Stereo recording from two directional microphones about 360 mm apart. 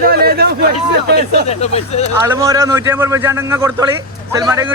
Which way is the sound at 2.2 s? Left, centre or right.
Centre.